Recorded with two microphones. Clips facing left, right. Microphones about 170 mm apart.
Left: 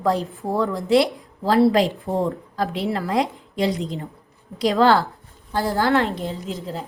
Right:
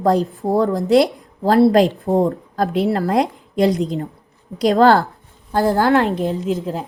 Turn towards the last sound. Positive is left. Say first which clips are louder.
# right 8 dB
turn(degrees=-50)  # may be behind; listen again after turning